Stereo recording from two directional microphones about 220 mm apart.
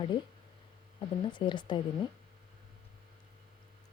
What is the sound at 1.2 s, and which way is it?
Speech, 20° left (ahead or behind).